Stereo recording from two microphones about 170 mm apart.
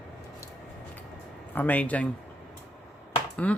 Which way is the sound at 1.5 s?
10° left (ahead or behind).